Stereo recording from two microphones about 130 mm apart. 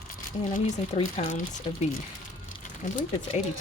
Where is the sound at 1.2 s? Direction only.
90° left.